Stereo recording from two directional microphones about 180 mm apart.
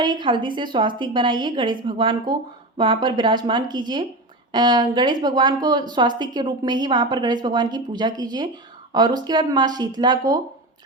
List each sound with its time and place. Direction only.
0.0 s a woman's voice: 25° right (ahead or behind)